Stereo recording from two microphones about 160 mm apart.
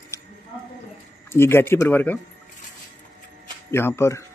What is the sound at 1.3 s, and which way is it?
Speech, 15° left (ahead or behind).